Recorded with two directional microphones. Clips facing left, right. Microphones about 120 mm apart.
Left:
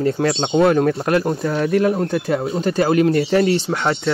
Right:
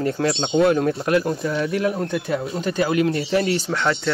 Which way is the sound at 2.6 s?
40° left (ahead or behind).